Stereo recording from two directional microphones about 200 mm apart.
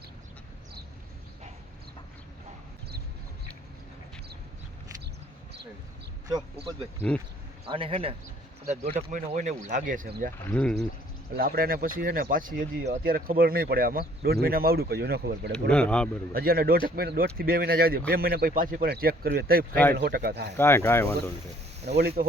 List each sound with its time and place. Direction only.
6.2 s a man's voice: 20° right (ahead or behind); by 10.3 s 45° right (ahead or behind)
10.4 s speech: 5° left (ahead or behind)
11.3 s speech: 50° right (ahead or behind)
15.7 s speech: 5° left (ahead or behind)
16.3 s speech: 50° right (ahead or behind)
19.7 s speech: 10° left (ahead or behind)
20.0 s speech: 55° right (ahead or behind)
20.6 s speech: 10° left (ahead or behind)
21.8 s speech: 55° right (ahead or behind)